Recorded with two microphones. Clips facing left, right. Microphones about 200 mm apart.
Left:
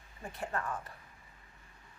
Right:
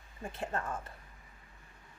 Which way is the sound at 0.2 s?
25° right (ahead or behind).